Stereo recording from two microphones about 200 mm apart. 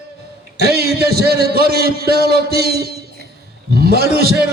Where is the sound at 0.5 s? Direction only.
55° right (ahead or behind).